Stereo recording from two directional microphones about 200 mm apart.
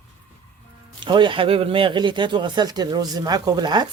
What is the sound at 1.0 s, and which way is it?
Speech, 25° right (ahead or behind).